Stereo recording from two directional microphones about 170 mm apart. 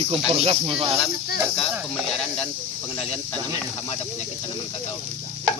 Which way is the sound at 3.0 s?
35° left (ahead or behind).